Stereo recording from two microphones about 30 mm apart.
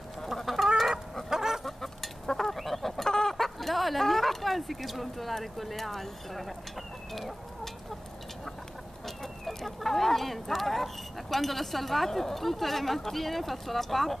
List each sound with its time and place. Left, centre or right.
0.6 s chicken: centre
1.6 s chicken: centre
2.5 s chicken: centre
3.1 s chicken: left
3.3 s a sound: centre
5.4 s speech: centre
7.2 s chicken: centre
9.0 s speech: centre